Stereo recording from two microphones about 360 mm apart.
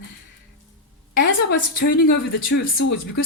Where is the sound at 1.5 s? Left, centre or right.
Left.